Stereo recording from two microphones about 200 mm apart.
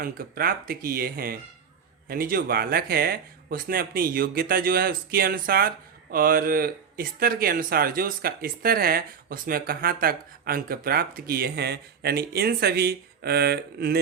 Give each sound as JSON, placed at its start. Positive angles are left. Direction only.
{"t": 0.0, "sound": "speech", "side_deg": -45}